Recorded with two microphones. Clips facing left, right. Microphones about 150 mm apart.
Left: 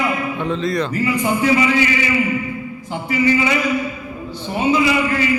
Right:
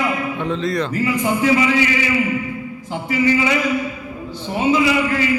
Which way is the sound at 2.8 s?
90° right.